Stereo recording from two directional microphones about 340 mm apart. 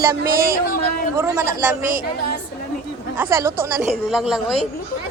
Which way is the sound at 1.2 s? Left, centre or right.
Centre.